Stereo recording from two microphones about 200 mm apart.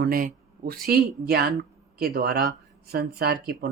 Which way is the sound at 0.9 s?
55° right (ahead or behind).